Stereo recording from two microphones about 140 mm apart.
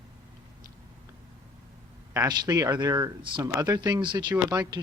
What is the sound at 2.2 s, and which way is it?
Speech, 30° right (ahead or behind).